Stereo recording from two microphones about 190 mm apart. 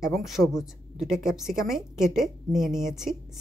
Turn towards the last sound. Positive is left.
turn(degrees=0)  # may be behind; listen again after turning